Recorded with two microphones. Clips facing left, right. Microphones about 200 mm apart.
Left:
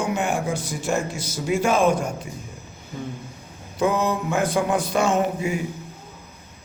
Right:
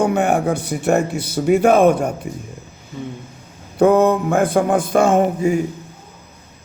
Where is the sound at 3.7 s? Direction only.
60° right (ahead or behind).